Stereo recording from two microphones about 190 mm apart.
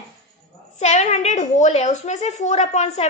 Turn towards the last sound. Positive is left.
turn(degrees=35)  # may be behind; listen again after turning